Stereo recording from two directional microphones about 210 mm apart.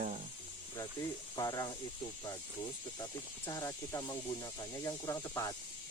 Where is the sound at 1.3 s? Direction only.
15° left (ahead or behind).